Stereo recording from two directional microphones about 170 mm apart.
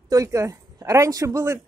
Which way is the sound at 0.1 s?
20° right (ahead or behind).